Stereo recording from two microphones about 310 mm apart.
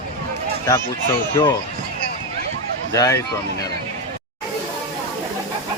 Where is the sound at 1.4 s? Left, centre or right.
Centre.